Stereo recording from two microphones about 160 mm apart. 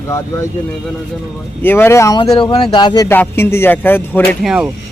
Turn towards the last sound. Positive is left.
turn(degrees=-5)  # may be behind; listen again after turning